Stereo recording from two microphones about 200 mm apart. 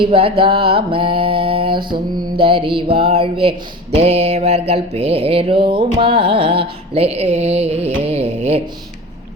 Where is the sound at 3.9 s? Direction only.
30° right (ahead or behind).